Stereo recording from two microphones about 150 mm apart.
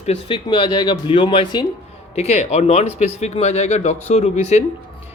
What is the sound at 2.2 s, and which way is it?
Speech, 45° left (ahead or behind).